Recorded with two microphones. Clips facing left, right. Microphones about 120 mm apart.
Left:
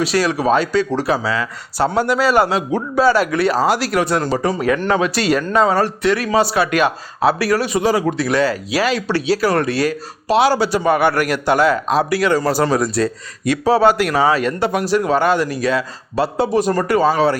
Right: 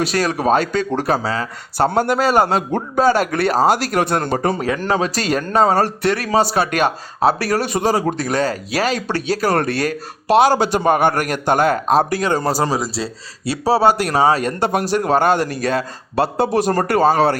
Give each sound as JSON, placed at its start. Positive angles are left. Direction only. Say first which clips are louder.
{"t": 0.0, "sound": "speech", "louder": "left 1 dB", "side_deg": -50}
{"t": 4.6, "sound": "speech", "louder": "left 2 dB", "side_deg": -35}
{"t": 6.0, "sound": "speech", "louder": "left 1 dB", "side_deg": -50}
{"t": 12.7, "sound": "speech", "louder": "left 5 dB", "side_deg": -25}
{"t": 14.6, "sound": "a man's voice", "louder": "left 1 dB", "side_deg": -50}
{"t": 16.9, "sound": "speech", "louder": "even", "side_deg": -50}